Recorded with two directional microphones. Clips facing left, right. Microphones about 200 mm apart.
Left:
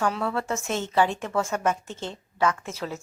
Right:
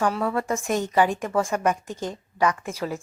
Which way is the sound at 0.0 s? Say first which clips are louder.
Right 2 dB; 5° right (ahead or behind).